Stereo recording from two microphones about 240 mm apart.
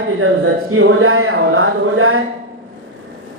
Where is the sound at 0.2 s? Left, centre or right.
Right.